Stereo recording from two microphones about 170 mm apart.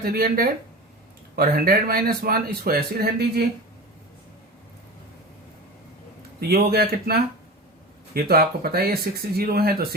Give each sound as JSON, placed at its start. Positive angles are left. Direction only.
{"t": 0.0, "sound": "a man's voice", "side_deg": -65}
{"t": 6.4, "sound": "a man's voice", "side_deg": -65}